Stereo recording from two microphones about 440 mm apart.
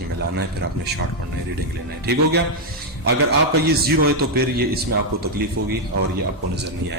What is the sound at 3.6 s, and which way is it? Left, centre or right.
Speech, right.